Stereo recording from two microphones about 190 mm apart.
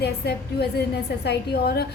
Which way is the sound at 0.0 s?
60° left (ahead or behind).